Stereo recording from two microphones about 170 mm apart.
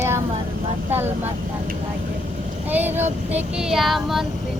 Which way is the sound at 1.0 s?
10° right (ahead or behind).